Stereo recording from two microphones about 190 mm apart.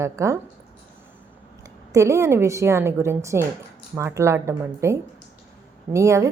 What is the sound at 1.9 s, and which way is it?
A woman's voice, 15° right (ahead or behind).